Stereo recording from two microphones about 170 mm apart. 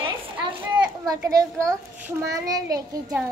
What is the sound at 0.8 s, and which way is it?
A child's voice, 20° right (ahead or behind).